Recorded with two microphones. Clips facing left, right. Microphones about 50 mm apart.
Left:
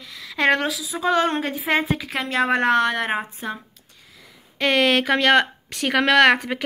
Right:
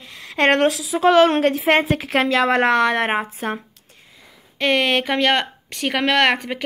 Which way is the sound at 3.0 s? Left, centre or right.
Right.